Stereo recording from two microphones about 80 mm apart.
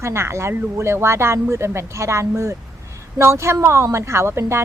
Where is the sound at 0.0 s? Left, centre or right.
Right.